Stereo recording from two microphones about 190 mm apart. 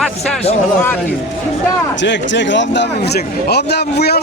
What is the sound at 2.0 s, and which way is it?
A man's voice, 70° left (ahead or behind).